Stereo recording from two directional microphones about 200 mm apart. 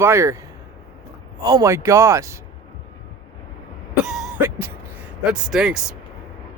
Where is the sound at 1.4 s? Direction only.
15° right (ahead or behind).